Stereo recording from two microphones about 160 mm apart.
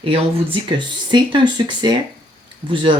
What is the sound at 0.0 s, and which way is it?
Speech, 35° right (ahead or behind).